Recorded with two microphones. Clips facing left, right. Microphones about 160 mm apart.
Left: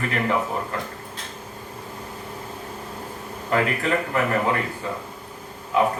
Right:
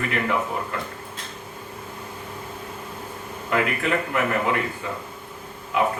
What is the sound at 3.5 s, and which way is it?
Speech, 35° left (ahead or behind).